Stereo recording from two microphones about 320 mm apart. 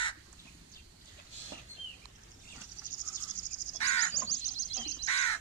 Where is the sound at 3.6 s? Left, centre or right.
Left.